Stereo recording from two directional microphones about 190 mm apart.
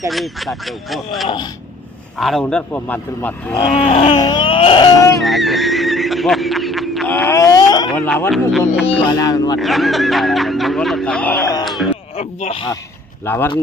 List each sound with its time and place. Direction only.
0.1 s a man's voice: centre (ahead or behind)
3.5 s speech: 25° left (ahead or behind)
5.2 s a sound: centre (ahead or behind)
7.1 s a sound: 15° left (ahead or behind)
7.9 s speech: 5° left (ahead or behind)
8.9 s speech: 25° left (ahead or behind)
9.6 s speech: centre (ahead or behind)
11.6 s a sound: centre (ahead or behind)
12.1 s speech: 35° left (ahead or behind)
13.2 s a man's voice: 10° left (ahead or behind)